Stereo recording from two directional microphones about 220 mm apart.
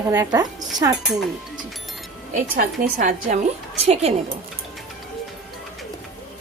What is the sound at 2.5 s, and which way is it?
A woman's voice, 40° right (ahead or behind).